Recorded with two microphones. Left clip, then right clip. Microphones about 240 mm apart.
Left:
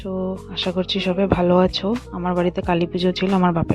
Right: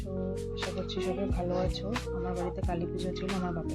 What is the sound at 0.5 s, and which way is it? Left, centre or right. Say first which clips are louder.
Speech: left 12 dB; left.